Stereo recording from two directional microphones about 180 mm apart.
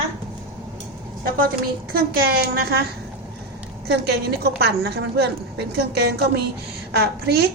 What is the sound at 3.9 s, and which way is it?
A woman's voice, 65° right (ahead or behind).